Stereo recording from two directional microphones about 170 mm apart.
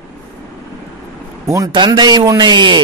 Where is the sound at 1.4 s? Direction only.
20° right (ahead or behind).